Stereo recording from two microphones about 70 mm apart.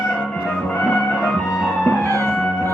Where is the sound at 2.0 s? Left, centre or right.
Right.